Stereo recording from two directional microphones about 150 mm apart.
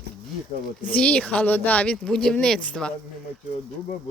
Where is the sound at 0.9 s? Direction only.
10° left (ahead or behind).